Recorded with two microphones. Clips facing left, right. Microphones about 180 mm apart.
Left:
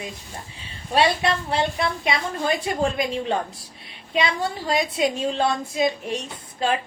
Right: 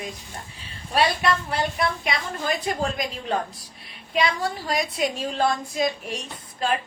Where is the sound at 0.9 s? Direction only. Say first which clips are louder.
Left 2 dB; 25° left (ahead or behind).